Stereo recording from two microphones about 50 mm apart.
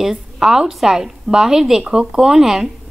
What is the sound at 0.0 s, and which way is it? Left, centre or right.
Speech, centre.